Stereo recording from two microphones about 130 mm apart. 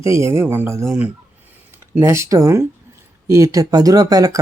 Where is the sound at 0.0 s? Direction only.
20° right (ahead or behind).